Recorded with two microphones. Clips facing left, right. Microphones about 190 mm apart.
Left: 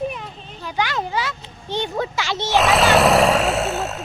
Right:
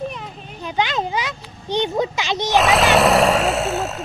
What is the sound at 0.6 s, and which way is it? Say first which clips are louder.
A child's voice: right 2 dB; 20° right (ahead or behind).